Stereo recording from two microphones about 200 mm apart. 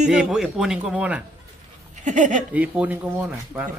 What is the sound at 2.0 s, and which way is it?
Speech, 40° right (ahead or behind).